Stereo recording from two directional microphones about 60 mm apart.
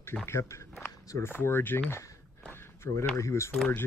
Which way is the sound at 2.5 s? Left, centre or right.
Left.